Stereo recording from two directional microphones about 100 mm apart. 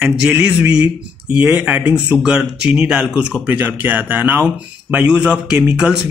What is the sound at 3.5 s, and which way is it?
A man's voice, 20° right (ahead or behind).